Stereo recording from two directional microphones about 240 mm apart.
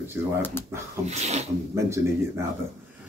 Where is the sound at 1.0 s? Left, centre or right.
Right.